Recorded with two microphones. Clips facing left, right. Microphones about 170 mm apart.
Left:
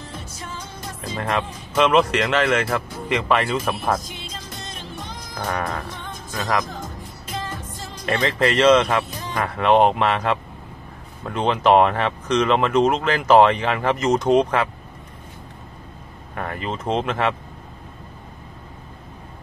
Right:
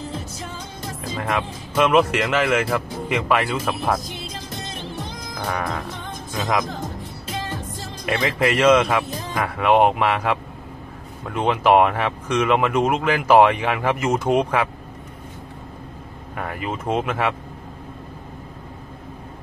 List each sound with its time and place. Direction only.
1.0 s speech: centre (ahead or behind)
5.4 s speech: centre (ahead or behind)
6.3 s speech: 20° right (ahead or behind)
8.0 s speech: centre (ahead or behind)
16.3 s speech: 5° right (ahead or behind)